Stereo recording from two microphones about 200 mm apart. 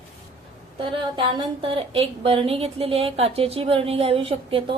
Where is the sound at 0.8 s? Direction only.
25° right (ahead or behind).